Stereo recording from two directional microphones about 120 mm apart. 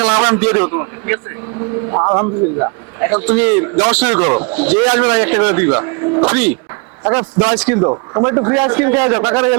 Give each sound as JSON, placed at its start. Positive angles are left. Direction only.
{"t": 0.0, "sound": "a man's voice", "side_deg": -15}
{"t": 3.1, "sound": "a man's voice", "side_deg": -15}
{"t": 7.8, "sound": "a man's voice", "side_deg": -30}